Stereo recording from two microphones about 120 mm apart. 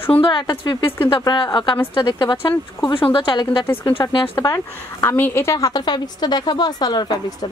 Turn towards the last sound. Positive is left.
turn(degrees=40)  # may be behind; listen again after turning